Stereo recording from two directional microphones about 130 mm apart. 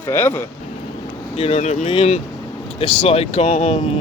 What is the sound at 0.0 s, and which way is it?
Speech, 15° left (ahead or behind).